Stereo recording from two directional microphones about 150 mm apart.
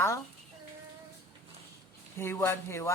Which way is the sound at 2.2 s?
15° left (ahead or behind).